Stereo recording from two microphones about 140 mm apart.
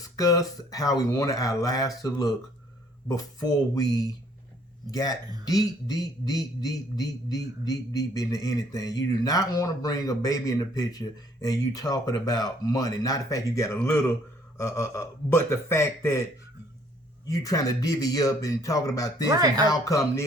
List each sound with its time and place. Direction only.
0.0 s mantra: 25° left (ahead or behind)
17.2 s mantra: 25° left (ahead or behind)
19.3 s speech: 25° right (ahead or behind)
19.6 s mantra: 25° left (ahead or behind)